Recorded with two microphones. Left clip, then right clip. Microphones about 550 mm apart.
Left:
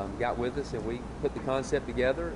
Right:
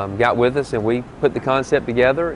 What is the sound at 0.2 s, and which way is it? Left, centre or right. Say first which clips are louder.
Speech: right 15 dB; right.